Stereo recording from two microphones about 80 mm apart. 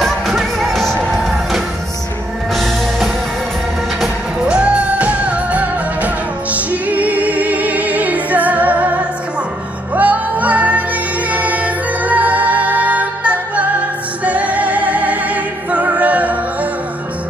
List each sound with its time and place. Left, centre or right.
0.0 s music: centre
4.0 s music: centre
9.9 s music: centre